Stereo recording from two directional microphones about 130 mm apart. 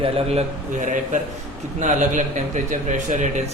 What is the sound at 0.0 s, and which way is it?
Speech, 50° right (ahead or behind).